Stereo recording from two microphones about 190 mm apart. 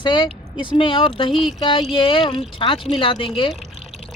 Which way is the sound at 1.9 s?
25° left (ahead or behind).